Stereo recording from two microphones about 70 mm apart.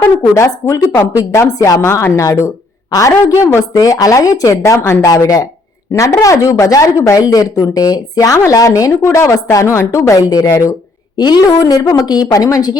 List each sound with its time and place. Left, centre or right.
0.2 s speech: left
3.8 s speech: left
10.2 s speech: left
10.4 s speech: left
11.2 s speech: left